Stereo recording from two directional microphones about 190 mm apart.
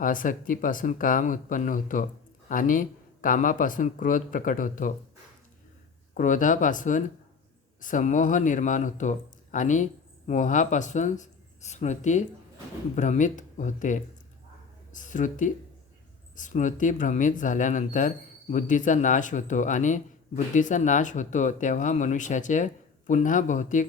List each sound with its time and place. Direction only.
0.0 s speech: 45° left (ahead or behind)
6.1 s speech: 45° left (ahead or behind)